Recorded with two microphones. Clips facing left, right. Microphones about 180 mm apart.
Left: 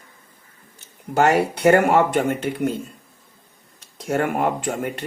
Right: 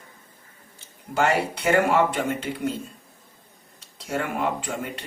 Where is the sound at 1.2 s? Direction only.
50° left (ahead or behind).